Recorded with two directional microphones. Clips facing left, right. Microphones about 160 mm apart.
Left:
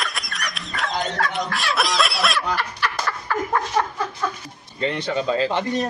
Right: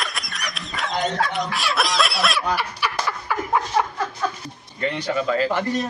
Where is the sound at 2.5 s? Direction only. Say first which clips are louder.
Right 1 dB; 10° right (ahead or behind).